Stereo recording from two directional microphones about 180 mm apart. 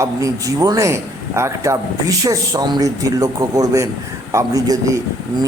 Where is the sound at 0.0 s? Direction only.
20° right (ahead or behind).